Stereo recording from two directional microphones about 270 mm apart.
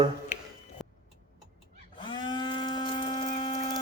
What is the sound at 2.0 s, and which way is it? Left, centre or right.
Livestock, centre.